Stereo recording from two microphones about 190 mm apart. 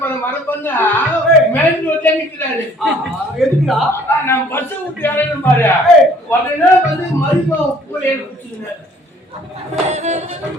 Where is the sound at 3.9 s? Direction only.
10° left (ahead or behind).